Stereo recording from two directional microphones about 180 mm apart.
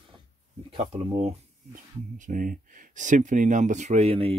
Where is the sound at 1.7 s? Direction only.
45° right (ahead or behind).